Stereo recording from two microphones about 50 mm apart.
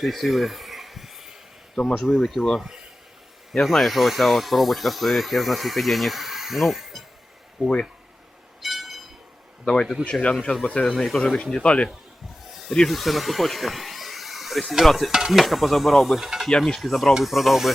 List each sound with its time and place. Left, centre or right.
0.0 s a sound: centre
2.0 s speech: centre
2.6 s speech: centre
3.5 s speech: centre
7.6 s speech: centre
8.6 s a sound: centre
10.0 s speech: left
11.0 s speech: centre
11.6 s speech: left
12.9 s speech: centre
16.2 s speech: centre
16.5 s speech: centre